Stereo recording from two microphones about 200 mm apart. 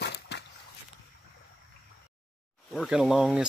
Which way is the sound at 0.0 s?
55° left (ahead or behind).